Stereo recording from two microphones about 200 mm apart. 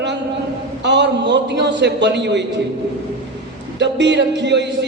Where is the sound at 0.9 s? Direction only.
60° right (ahead or behind).